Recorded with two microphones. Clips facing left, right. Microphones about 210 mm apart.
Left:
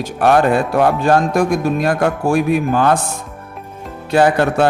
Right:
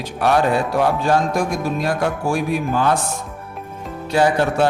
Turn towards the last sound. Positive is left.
turn(degrees=55)  # may be behind; listen again after turning